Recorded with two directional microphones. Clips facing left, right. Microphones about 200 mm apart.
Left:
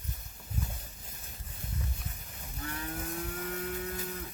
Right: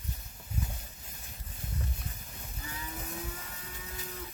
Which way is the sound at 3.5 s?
60° left (ahead or behind).